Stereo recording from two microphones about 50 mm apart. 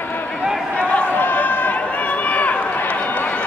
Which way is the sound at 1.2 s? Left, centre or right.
Left.